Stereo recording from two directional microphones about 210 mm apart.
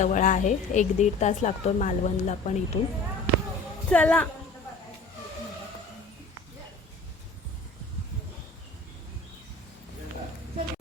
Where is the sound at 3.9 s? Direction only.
5° left (ahead or behind).